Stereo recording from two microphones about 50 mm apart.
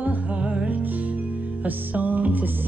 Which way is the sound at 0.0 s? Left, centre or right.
Right.